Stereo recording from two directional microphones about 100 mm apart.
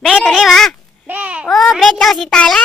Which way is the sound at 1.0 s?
15° right (ahead or behind).